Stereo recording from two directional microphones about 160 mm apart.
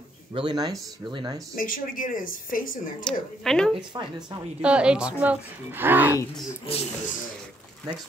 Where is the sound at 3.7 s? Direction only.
30° right (ahead or behind).